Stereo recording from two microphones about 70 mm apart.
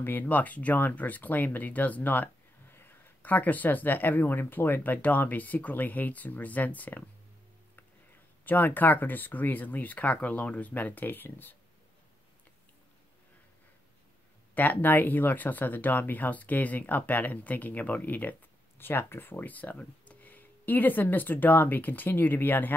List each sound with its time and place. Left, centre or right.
0.0 s speech: left
8.5 s speech: left
14.5 s speech: left